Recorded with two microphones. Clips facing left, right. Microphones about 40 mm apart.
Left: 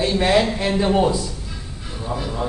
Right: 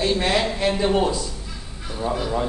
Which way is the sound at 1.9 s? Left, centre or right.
Right.